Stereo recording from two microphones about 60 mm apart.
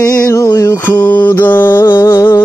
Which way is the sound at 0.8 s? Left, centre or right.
Left.